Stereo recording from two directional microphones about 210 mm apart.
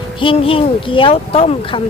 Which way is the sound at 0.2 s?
25° left (ahead or behind).